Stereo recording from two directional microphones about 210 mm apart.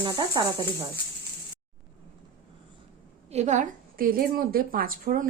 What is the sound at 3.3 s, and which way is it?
A woman's voice, 35° right (ahead or behind).